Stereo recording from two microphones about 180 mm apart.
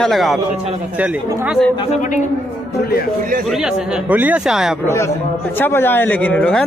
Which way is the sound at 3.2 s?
50° right (ahead or behind).